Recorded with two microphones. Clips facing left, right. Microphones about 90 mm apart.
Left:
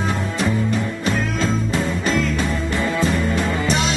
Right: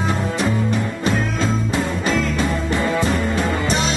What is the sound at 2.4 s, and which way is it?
Music, 20° right (ahead or behind).